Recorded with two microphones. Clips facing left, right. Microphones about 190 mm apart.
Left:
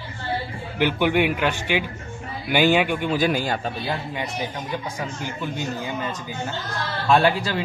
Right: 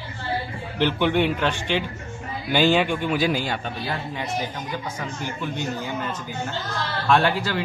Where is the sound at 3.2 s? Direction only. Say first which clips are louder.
Left 1 dB; 50° left (ahead or behind).